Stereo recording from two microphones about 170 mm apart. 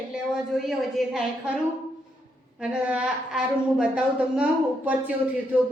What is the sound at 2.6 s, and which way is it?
A man's voice, 5° right (ahead or behind).